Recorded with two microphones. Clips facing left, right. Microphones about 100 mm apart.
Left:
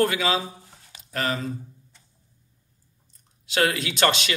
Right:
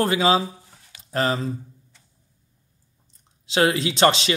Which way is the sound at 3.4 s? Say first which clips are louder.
Right 4 dB; 25° right (ahead or behind).